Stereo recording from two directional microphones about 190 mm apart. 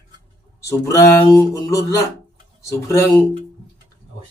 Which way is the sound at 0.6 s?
15° left (ahead or behind).